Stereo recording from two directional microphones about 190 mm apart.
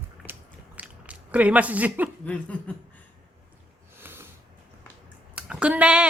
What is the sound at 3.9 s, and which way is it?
Sniff, 10° right (ahead or behind).